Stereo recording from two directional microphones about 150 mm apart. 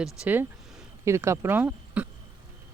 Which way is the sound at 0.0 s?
10° right (ahead or behind).